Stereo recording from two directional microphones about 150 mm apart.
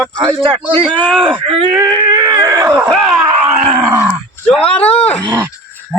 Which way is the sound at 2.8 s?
5° right (ahead or behind).